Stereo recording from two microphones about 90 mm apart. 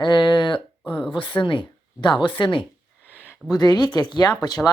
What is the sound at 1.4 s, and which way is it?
Speech, 65° left (ahead or behind).